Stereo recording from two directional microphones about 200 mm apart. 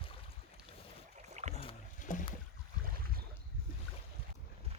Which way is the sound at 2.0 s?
40° left (ahead or behind).